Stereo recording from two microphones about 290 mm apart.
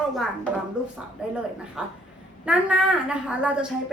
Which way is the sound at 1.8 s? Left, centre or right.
Centre.